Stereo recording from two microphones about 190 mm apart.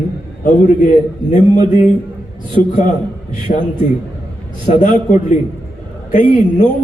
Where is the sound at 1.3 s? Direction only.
40° left (ahead or behind).